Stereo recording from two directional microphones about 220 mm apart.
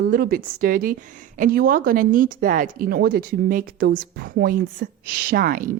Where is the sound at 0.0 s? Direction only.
40° right (ahead or behind).